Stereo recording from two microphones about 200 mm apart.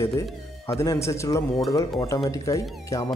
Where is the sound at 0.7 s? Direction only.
15° left (ahead or behind).